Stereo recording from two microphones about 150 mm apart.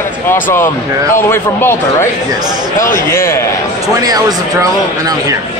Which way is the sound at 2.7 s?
65° left (ahead or behind).